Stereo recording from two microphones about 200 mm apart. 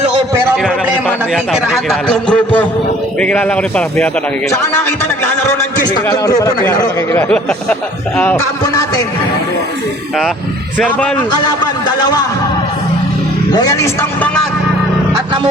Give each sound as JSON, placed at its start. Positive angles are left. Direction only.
{"t": 1.3, "sound": "a man's voice", "side_deg": 0}
{"t": 5.2, "sound": "a man's voice", "side_deg": 15}
{"t": 10.8, "sound": "a man's voice", "side_deg": 5}
{"t": 11.3, "sound": "a man's voice", "side_deg": 20}
{"t": 13.5, "sound": "a man's voice", "side_deg": 20}